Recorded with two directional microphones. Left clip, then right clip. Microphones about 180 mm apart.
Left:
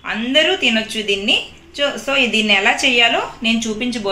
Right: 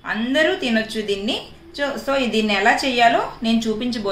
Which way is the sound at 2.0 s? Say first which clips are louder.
Left 5 dB; 15° left (ahead or behind).